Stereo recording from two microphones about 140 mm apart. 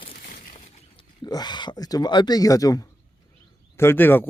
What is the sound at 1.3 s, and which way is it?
Speech, 30° left (ahead or behind).